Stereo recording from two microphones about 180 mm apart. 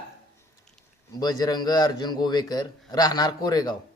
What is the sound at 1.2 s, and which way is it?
A man's voice, 20° left (ahead or behind).